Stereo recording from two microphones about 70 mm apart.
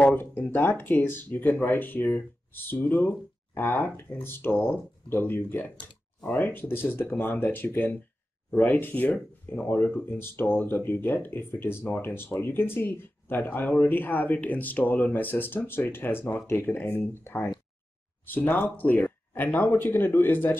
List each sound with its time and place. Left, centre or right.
0.0 s speech: left